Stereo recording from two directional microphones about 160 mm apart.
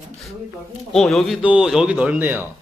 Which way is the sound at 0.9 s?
5° left (ahead or behind).